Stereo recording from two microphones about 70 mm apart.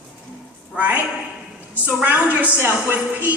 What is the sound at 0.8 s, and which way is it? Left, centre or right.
A man's voice, right.